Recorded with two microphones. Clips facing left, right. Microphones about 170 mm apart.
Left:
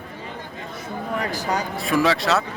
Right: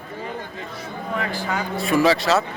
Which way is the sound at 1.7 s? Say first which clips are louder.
Right 4 dB; centre (ahead or behind).